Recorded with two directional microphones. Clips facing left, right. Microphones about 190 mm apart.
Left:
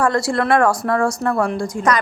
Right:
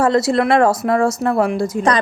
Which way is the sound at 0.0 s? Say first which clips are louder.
Right 3 dB; 20° right (ahead or behind).